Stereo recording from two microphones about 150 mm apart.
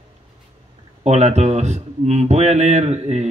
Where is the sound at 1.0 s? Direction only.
50° right (ahead or behind).